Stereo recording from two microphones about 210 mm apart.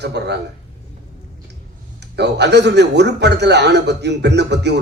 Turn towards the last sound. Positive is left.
turn(degrees=-55)  # may be behind; listen again after turning